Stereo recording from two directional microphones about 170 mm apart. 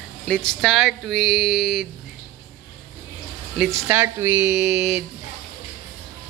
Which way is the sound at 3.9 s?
10° right (ahead or behind).